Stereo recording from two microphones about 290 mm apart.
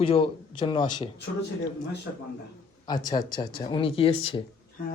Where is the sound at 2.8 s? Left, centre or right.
Centre.